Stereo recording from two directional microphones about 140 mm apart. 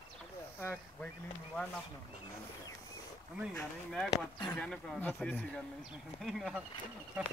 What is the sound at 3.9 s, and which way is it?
Speech, centre (ahead or behind).